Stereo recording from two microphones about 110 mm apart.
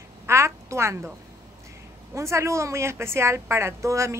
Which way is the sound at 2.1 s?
25° right (ahead or behind).